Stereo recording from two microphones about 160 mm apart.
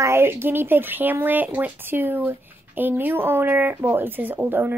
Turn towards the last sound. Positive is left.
turn(degrees=-10)  # may be behind; listen again after turning